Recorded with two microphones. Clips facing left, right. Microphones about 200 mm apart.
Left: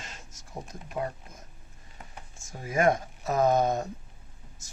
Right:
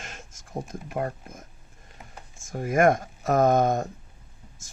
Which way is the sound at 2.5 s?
55° right (ahead or behind).